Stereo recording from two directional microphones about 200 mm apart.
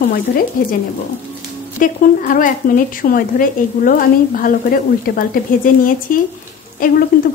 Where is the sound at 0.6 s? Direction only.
45° left (ahead or behind).